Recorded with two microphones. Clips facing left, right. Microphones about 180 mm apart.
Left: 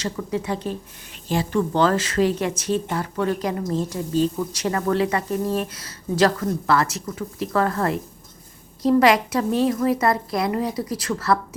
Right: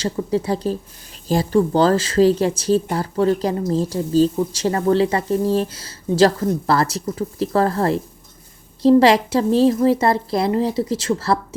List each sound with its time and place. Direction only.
0.0 s a woman's voice: 30° right (ahead or behind)